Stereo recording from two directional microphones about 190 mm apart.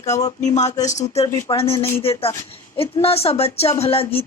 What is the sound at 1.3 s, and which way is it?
Speech, 20° left (ahead or behind).